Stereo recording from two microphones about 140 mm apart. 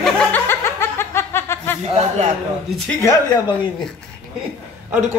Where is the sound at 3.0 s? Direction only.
30° left (ahead or behind).